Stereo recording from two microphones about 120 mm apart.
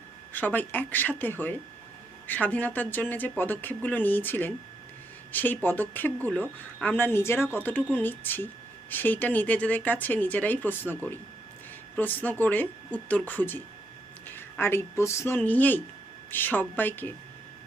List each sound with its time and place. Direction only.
0.3 s speech: 15° left (ahead or behind)